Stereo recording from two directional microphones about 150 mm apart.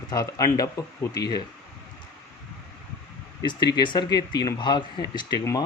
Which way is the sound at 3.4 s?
30° left (ahead or behind).